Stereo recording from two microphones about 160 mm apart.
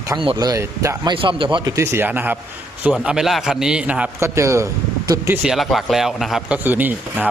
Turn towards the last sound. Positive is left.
turn(degrees=-10)  # may be behind; listen again after turning